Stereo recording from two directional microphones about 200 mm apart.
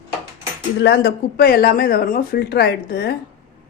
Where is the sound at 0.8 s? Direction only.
60° left (ahead or behind).